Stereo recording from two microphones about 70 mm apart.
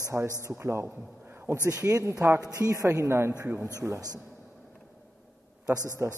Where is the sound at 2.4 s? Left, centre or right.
Right.